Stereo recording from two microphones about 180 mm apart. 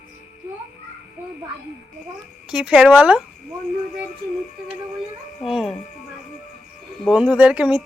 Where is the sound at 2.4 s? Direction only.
5° right (ahead or behind).